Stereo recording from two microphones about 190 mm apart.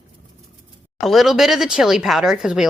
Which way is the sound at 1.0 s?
Centre (ahead or behind).